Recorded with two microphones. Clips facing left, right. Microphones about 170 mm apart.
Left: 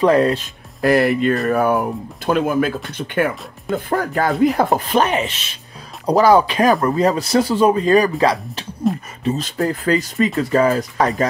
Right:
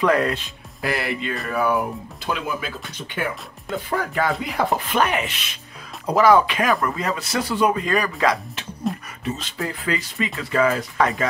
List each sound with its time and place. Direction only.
0.0 s speech: 30° left (ahead or behind)
0.7 s speech: 45° left (ahead or behind)
3.9 s speech: 45° left (ahead or behind)
5.0 s speech: 30° left (ahead or behind)
8.9 s beatboxing: centre (ahead or behind)
9.2 s speech: 40° left (ahead or behind)